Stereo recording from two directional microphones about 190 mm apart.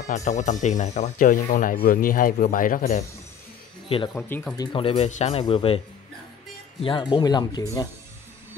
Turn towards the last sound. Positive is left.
turn(degrees=20)  # may be behind; listen again after turning